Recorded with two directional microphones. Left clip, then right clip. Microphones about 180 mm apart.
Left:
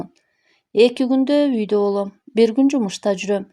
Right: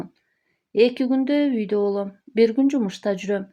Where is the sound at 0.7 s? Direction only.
40° left (ahead or behind).